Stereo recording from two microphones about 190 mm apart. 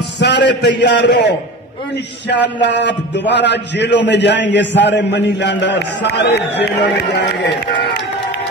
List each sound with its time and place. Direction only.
0.2 s a man's voice: 65° left (ahead or behind)